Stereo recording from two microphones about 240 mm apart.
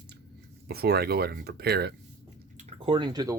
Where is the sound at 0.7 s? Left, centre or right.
Right.